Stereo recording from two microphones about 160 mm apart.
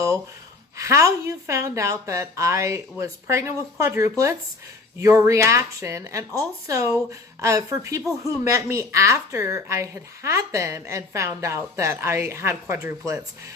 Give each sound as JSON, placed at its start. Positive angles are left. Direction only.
{"t": 0.8, "sound": "speech", "side_deg": -20}